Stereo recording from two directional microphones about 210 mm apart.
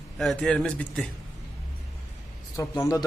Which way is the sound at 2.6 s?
15° left (ahead or behind).